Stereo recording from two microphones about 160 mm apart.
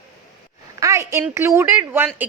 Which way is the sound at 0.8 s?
20° right (ahead or behind).